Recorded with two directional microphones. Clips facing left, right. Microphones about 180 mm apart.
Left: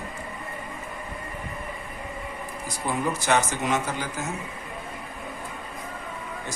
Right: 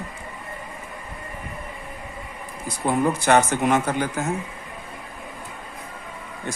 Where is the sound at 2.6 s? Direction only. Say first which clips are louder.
Right 6 dB; 55° right (ahead or behind).